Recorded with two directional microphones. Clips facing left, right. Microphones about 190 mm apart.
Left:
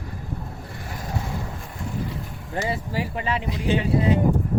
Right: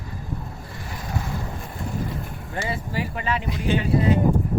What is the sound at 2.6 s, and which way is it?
Speech, 30° left (ahead or behind).